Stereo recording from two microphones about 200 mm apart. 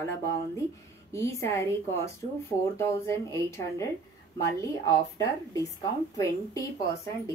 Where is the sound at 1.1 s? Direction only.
15° left (ahead or behind).